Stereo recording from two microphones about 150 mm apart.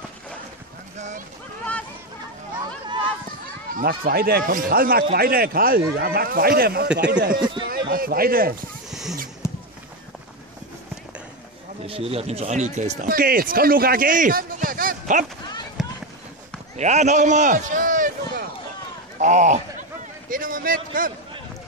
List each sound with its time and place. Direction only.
0.9 s a sound: 50° right (ahead or behind)
3.7 s a man's voice: 85° right
7.3 s speech: 30° right (ahead or behind)
7.9 s a man's voice: 75° right (ahead or behind)
9.4 s a sound: 20° left (ahead or behind)
11.8 s speech: 40° right (ahead or behind)
13.1 s a man's voice: 75° right (ahead or behind)
15.8 s run: centre (ahead or behind)
16.7 s a man's voice: 50° right (ahead or behind)
19.1 s a sound: 50° right (ahead or behind)